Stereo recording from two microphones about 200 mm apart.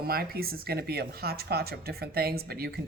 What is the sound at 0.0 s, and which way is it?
Speech, 50° right (ahead or behind).